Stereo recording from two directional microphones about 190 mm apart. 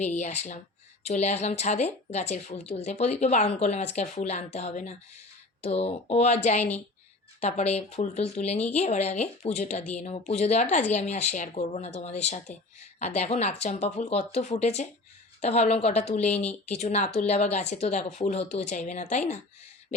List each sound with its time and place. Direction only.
0.0 s a woman's voice: 35° left (ahead or behind)